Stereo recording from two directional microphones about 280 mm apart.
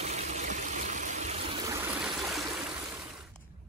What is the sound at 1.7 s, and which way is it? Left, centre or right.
Stream, centre.